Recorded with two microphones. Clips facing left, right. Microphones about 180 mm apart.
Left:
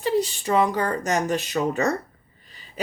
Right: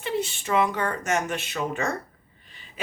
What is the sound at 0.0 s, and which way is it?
Speech, 35° left (ahead or behind).